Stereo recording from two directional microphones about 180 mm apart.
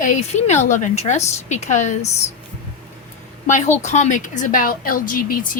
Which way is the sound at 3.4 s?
40° left (ahead or behind).